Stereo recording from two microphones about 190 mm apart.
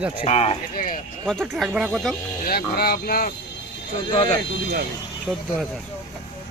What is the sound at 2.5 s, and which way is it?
Speech, 55° left (ahead or behind).